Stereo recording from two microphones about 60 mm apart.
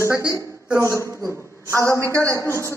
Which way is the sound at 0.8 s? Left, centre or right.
Right.